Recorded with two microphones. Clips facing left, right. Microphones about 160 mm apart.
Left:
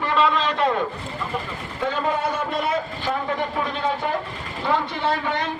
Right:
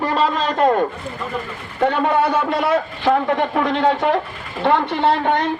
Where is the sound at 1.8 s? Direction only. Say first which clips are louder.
Right 7 dB; 65° right (ahead or behind).